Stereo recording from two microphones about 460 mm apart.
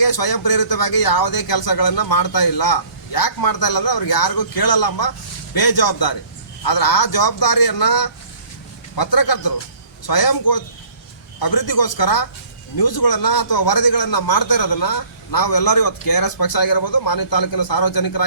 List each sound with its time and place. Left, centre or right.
0.0 s a man's voice: left